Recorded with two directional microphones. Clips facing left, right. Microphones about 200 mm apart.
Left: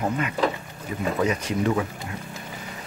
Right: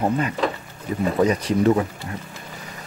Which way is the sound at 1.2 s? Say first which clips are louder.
Right 6 dB; 40° right (ahead or behind).